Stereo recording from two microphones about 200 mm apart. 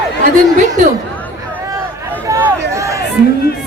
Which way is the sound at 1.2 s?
10° left (ahead or behind).